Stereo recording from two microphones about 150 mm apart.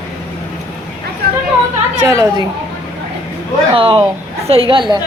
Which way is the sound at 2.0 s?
25° right (ahead or behind).